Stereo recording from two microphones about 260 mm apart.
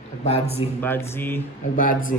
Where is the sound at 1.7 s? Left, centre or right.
Left.